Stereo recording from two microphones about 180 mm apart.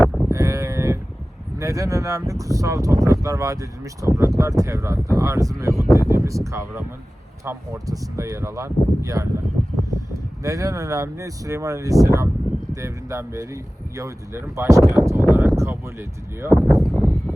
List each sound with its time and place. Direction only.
0.0 s moo: centre (ahead or behind)
0.3 s moo: 20° right (ahead or behind)
1.5 s speech: 20° right (ahead or behind)
16.8 s a sound: centre (ahead or behind)